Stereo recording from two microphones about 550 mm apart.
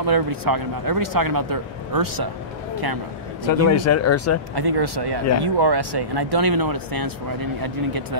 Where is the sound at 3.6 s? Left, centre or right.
Left.